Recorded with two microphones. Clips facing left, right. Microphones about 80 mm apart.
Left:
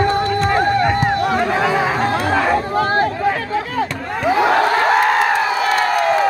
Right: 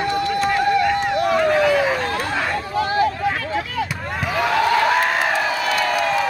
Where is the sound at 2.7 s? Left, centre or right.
Left.